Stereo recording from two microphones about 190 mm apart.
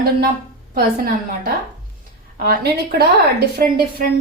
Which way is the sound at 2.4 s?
55° right (ahead or behind).